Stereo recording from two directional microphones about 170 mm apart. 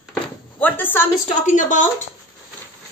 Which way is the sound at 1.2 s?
45° left (ahead or behind).